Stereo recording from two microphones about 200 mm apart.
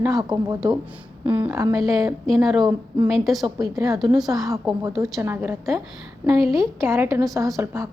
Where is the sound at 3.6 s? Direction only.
15° right (ahead or behind).